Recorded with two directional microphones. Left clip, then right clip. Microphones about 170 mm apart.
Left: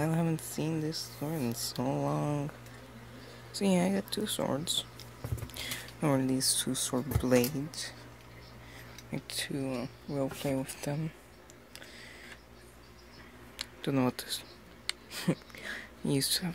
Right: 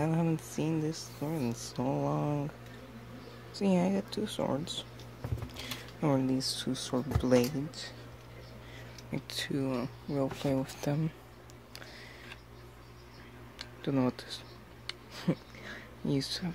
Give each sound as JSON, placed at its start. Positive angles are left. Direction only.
{"t": 0.0, "sound": "speech", "side_deg": 0}
{"t": 3.5, "sound": "speech", "side_deg": 0}
{"t": 9.1, "sound": "speech", "side_deg": -10}
{"t": 13.6, "sound": "speech", "side_deg": 5}
{"t": 14.9, "sound": "a sound", "side_deg": 5}